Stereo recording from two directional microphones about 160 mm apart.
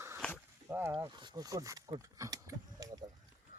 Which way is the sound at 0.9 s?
25° right (ahead or behind).